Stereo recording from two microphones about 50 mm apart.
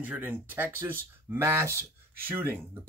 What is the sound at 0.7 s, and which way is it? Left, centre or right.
Speech, right.